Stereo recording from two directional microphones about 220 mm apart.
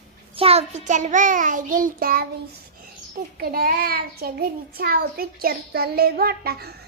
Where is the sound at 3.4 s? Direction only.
45° right (ahead or behind).